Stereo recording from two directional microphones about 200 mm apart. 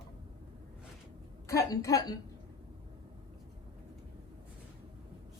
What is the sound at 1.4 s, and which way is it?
Speech, 15° left (ahead or behind).